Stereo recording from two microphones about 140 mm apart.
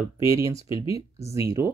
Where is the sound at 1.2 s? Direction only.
20° right (ahead or behind).